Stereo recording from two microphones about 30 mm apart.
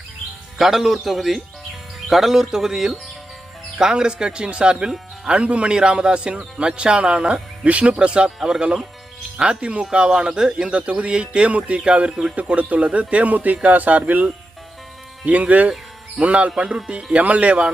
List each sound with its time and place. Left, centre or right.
0.6 s a man's voice: centre; by 7.9 s right
7.9 s a man's voice: right
9.5 s a man's voice: right
11.4 s speech: right
11.9 s a man's voice: right
12.1 s speech: right
12.5 s speech: right
13.3 s speech: right
15.2 s speech: right
16.7 s a man's voice: right
17.2 s speech: right